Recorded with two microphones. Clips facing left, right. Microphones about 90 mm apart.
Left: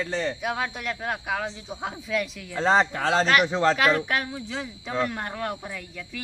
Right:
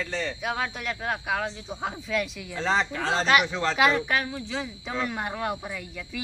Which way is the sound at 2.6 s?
40° left (ahead or behind).